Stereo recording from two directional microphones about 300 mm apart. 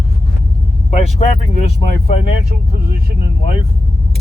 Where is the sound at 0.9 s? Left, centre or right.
Left.